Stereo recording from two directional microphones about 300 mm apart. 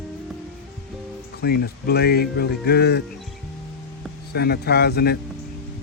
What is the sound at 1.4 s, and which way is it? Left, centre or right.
Speech, left.